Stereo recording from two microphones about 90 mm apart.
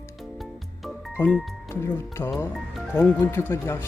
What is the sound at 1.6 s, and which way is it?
Speech, 25° left (ahead or behind).